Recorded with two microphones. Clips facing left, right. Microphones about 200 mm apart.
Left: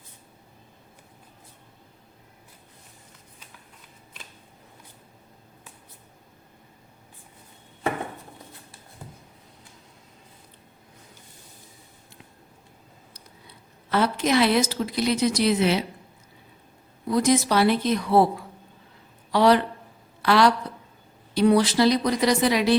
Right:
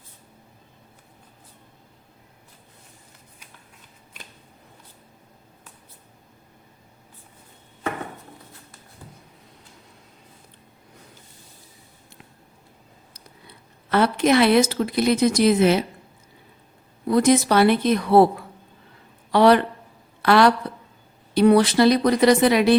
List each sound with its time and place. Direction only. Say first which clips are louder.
13.9 s speech: right 4 dB; 60° right (ahead or behind)
17.1 s a woman's voice: right 4 dB; 60° right (ahead or behind)